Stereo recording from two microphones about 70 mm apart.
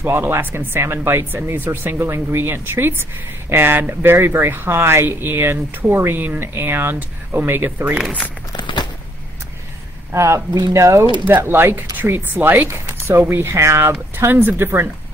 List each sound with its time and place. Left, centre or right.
0.0 s speech: right
10.1 s speech: right
11.2 s speech: right